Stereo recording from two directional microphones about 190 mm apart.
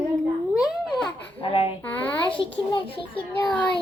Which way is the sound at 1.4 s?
30° left (ahead or behind).